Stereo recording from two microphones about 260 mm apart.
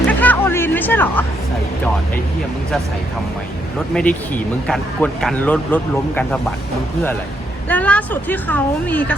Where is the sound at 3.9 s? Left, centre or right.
Centre.